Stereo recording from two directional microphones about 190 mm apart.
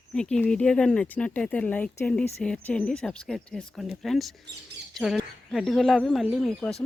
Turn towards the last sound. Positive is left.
turn(degrees=0)  # may be behind; listen again after turning